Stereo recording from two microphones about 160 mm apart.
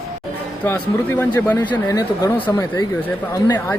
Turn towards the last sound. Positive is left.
turn(degrees=20)  # may be behind; listen again after turning